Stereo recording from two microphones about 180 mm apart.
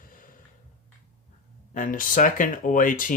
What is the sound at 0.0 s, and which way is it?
Snort, 50° left (ahead or behind).